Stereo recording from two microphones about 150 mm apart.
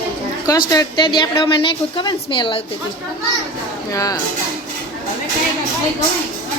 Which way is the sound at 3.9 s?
25° left (ahead or behind).